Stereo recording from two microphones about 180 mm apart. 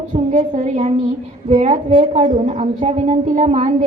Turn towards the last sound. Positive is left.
turn(degrees=-40)  # may be behind; listen again after turning